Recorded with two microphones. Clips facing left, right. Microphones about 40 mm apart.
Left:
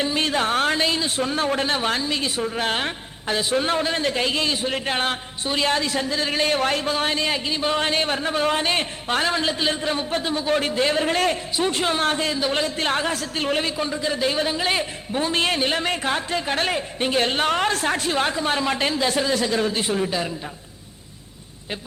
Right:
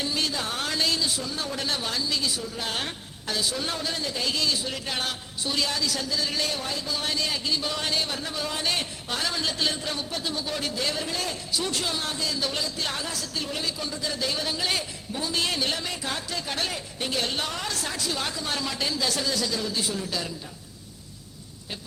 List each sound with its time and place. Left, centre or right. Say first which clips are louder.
0.0 s a sound: left 7 dB; left
0.9 s a man's voice: left 5 dB; left
2.7 s a man's voice: left 6 dB; left
6.6 s a man's voice: left 9 dB; left
11.5 s a man's voice: left 7 dB; left
12.3 s a man's voice: left 6 dB; left
20.1 s a man's voice: left 6 dB; left